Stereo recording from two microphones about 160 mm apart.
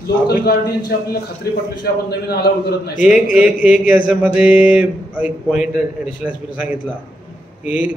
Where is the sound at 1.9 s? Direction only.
90° left.